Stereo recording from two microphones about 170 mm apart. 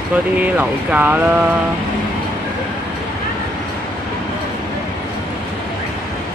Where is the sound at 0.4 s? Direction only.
10° right (ahead or behind).